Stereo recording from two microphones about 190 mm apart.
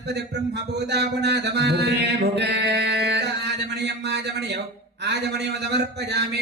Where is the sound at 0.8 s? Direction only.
60° right (ahead or behind).